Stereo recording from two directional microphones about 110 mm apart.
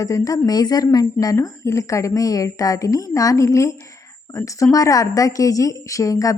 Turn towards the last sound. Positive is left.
turn(degrees=30)  # may be behind; listen again after turning